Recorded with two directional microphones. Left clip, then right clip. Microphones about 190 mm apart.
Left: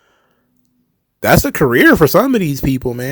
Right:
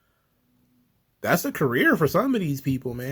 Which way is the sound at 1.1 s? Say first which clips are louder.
Left 11 dB; 50° left (ahead or behind).